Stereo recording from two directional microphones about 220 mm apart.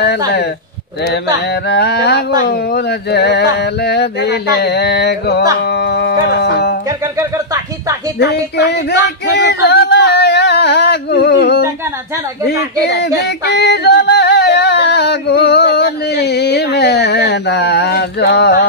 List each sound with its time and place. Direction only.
1.1 s speech: 50° left (ahead or behind)
7.2 s a sound: 15° right (ahead or behind)
8.2 s female singing: 50° left (ahead or behind)
12.8 s music: 50° left (ahead or behind)